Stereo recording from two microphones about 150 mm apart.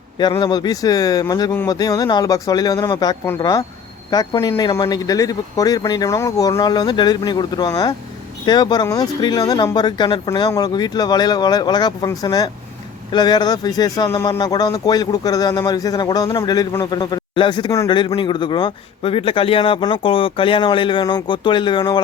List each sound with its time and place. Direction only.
0.2 s a man's voice: 30° left (ahead or behind)